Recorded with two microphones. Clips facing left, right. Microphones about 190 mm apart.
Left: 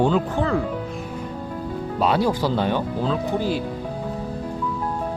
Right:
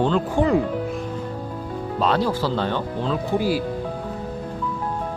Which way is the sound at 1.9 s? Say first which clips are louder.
Left 1 dB; 10° left (ahead or behind).